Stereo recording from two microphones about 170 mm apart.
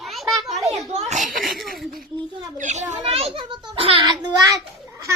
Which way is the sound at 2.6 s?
45° right (ahead or behind).